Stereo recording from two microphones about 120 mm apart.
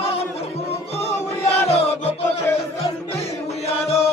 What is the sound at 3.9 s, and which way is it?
Chant, 60° left (ahead or behind).